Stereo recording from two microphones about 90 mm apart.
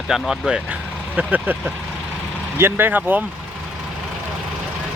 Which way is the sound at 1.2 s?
20° right (ahead or behind).